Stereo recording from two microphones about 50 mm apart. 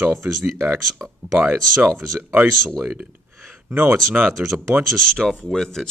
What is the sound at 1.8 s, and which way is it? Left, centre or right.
Speech, right.